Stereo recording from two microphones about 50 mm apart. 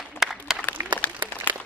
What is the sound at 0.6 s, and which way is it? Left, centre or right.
Applause, left.